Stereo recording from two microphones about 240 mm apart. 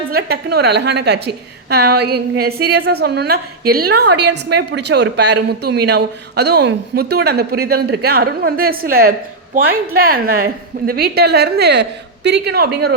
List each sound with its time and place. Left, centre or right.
0.1 s a woman's voice: right